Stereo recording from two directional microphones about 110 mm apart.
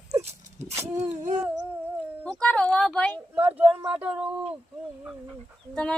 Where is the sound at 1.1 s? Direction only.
90° right.